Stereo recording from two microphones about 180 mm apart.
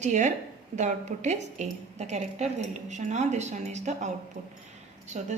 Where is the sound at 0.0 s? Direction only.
40° right (ahead or behind).